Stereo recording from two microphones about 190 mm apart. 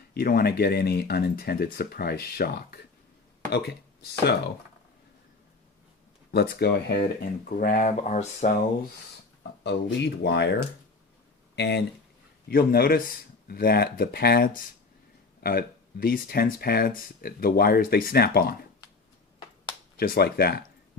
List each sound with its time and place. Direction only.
0.1 s speech: 50° left (ahead or behind)
6.3 s speech: 55° left (ahead or behind); by 8.5 s 40° left (ahead or behind)
9.4 s speech: 65° left (ahead or behind)
12.5 s speech: 55° left (ahead or behind)
20.0 s speech: 55° left (ahead or behind)